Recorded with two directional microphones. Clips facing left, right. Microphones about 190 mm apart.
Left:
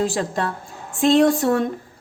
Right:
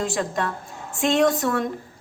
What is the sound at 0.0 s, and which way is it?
A woman's voice, 35° left (ahead or behind).